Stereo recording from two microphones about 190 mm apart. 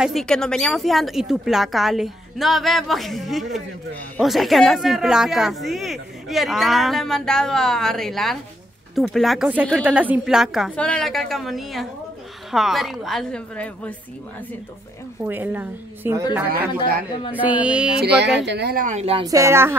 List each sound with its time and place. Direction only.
0.0 s speech: centre (ahead or behind)
15.2 s a woman's voice: 10° right (ahead or behind)
17.3 s a woman's voice: 10° right (ahead or behind)
18.0 s speech: 60° right (ahead or behind)
18.9 s speech: 35° right (ahead or behind)
19.2 s a woman's voice: 15° right (ahead or behind)